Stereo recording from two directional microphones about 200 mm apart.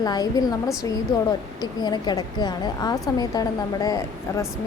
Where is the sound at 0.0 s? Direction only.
20° left (ahead or behind).